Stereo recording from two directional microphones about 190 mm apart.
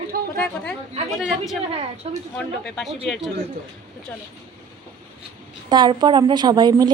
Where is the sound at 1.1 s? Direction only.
Centre (ahead or behind).